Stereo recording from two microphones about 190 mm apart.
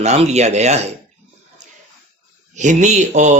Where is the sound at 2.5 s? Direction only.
40° right (ahead or behind).